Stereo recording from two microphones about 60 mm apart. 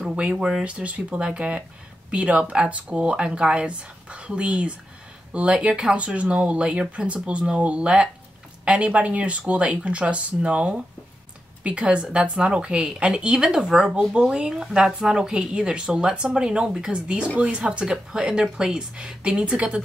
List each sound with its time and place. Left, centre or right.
0.1 s speech: centre
0.7 s speech: right